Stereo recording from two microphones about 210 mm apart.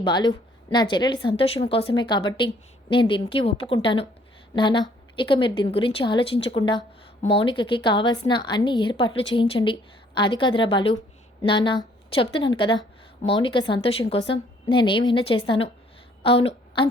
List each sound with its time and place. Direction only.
0.0 s a woman's voice: 20° left (ahead or behind)